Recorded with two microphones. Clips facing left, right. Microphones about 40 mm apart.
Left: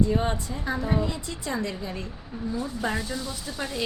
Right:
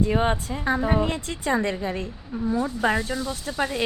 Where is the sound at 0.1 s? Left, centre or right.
Right.